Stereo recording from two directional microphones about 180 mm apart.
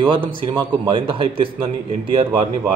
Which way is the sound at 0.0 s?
30° right (ahead or behind).